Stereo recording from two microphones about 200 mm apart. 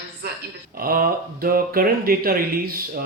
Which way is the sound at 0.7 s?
45° right (ahead or behind).